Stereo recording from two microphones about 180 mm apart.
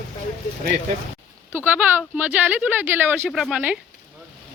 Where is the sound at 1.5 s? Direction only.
10° right (ahead or behind).